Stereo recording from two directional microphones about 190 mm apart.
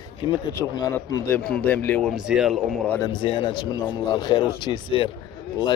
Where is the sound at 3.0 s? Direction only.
25° left (ahead or behind).